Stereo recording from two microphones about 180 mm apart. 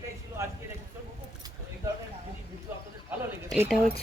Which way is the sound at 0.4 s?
15° right (ahead or behind).